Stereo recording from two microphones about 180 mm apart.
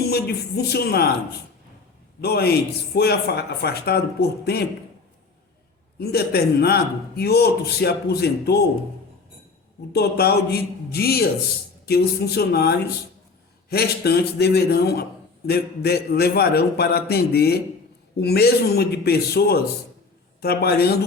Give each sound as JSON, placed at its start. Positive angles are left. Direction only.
{"t": 0.1, "sound": "speech", "side_deg": 65}
{"t": 2.2, "sound": "speech", "side_deg": 65}
{"t": 6.0, "sound": "speech", "side_deg": 60}
{"t": 9.9, "sound": "speech", "side_deg": 60}